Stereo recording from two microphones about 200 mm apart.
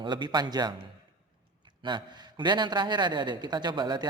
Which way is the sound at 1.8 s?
20° right (ahead or behind).